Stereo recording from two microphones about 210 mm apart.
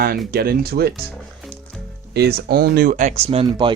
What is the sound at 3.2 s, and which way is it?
Speech, 25° right (ahead or behind).